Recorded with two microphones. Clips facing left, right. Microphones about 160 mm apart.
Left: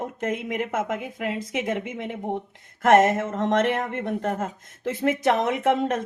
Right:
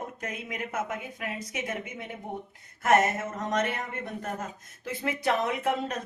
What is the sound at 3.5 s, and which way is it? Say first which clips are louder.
Speech: left 7 dB; 60° left (ahead or behind).